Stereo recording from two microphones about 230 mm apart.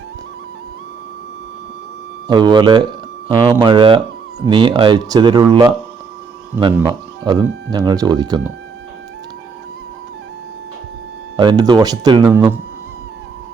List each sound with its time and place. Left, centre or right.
2.2 s speech: centre
11.3 s speech: centre